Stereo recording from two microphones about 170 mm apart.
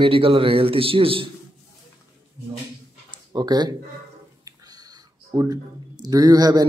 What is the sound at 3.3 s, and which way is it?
Speech, 25° right (ahead or behind).